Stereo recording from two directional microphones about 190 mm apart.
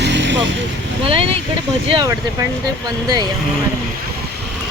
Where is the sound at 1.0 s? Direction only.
30° right (ahead or behind).